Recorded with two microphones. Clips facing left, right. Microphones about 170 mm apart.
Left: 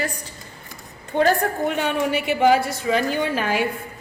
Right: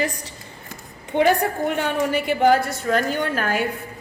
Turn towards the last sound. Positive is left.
turn(degrees=0)  # may be behind; listen again after turning